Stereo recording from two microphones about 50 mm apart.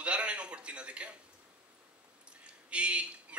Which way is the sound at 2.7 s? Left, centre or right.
Right.